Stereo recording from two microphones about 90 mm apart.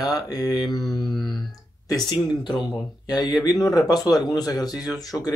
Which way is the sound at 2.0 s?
55° left (ahead or behind).